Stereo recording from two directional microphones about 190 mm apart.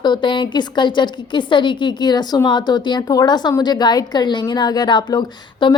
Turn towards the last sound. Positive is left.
turn(degrees=25)  # may be behind; listen again after turning